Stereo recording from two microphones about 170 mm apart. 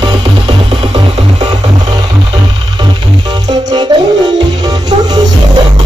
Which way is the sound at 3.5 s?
25° right (ahead or behind).